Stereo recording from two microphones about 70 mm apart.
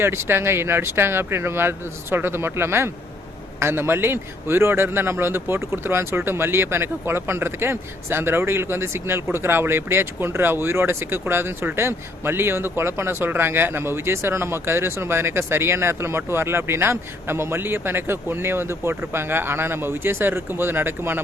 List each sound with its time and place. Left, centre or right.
0.0 s a man's voice: right